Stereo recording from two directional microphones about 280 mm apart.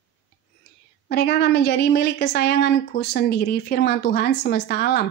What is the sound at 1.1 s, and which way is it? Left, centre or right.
A woman's voice, left.